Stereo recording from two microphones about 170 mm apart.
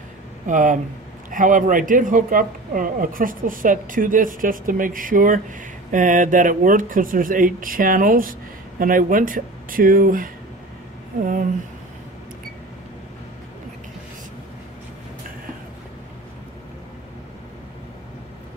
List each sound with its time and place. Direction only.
0.5 s speech: 50° right (ahead or behind)